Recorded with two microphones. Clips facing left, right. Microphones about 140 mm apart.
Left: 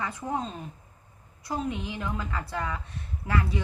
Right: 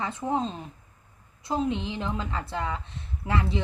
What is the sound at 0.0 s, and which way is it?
A woman's voice, 25° right (ahead or behind).